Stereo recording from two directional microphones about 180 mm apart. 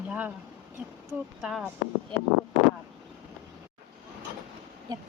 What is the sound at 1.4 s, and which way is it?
Speech, 5° right (ahead or behind).